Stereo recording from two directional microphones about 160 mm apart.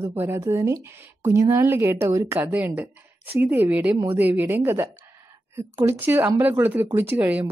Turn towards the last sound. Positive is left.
turn(degrees=-10)  # may be behind; listen again after turning